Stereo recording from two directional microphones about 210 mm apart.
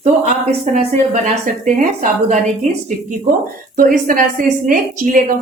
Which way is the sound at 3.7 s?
40° right (ahead or behind).